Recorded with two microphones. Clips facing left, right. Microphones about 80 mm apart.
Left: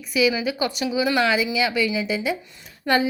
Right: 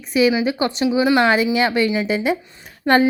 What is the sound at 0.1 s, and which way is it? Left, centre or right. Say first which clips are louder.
A woman's voice: right 5 dB; right.